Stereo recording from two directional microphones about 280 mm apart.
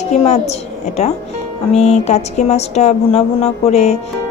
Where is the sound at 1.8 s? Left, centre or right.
Left.